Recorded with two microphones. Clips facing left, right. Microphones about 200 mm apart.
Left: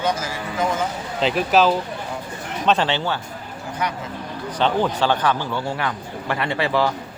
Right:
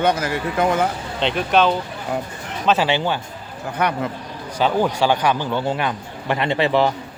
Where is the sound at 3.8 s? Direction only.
60° right (ahead or behind).